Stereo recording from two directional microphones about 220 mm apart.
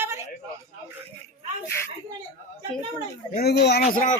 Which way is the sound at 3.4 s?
50° left (ahead or behind).